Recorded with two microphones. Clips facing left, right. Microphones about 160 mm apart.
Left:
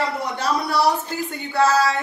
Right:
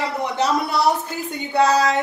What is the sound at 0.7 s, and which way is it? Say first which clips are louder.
A woman's voice: even; 20° right (ahead or behind).